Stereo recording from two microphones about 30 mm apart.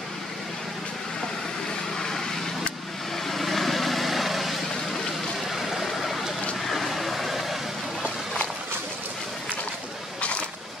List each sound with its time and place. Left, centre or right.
2.0 s vehicle: centre
3.3 s vehicle: centre
5.5 s a sound: centre
6.6 s vehicle: centre